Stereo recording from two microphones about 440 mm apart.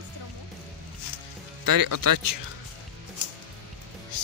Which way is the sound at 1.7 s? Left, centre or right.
Right.